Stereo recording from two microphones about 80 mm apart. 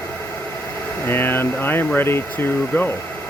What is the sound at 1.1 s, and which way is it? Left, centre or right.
Speech, left.